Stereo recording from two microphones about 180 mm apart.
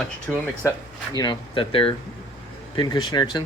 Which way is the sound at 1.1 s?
25° left (ahead or behind).